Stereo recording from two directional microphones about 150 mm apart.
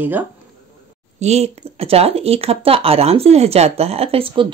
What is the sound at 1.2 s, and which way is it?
Speech, 45° right (ahead or behind).